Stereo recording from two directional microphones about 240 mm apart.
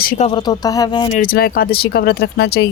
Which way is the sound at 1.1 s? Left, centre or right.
Left.